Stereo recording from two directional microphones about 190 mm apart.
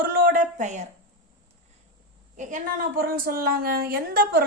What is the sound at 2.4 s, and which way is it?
A woman's voice, 40° right (ahead or behind).